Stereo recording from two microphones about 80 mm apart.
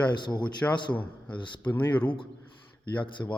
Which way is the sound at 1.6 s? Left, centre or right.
Centre.